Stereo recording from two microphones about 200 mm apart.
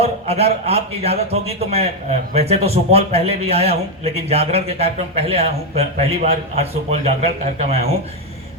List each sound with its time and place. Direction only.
0.0 s a man's voice: 30° right (ahead or behind)